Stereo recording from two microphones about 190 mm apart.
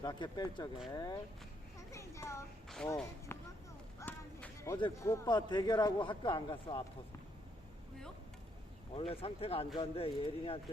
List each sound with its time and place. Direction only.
0.0 s a man's voice: 20° left (ahead or behind)
1.9 s a sound: 15° left (ahead or behind)
2.6 s speech: 5° left (ahead or behind)
4.0 s a sound: 10° left (ahead or behind)
4.8 s a man's voice: 15° left (ahead or behind)
9.0 s a man's voice: 30° left (ahead or behind)